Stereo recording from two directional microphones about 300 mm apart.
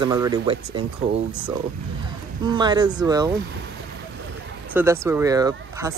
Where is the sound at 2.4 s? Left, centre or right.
Centre.